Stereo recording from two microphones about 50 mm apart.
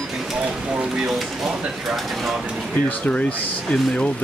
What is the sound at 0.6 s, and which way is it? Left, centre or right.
Speech, centre.